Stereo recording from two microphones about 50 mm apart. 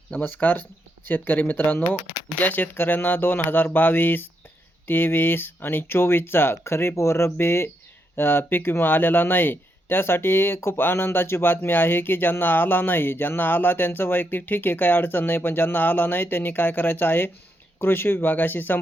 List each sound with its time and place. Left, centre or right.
0.2 s speech: left
7.3 s speech: left